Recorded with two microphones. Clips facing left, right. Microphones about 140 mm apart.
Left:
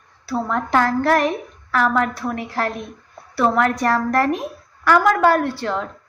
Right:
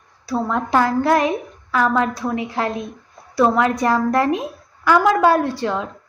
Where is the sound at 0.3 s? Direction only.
15° right (ahead or behind).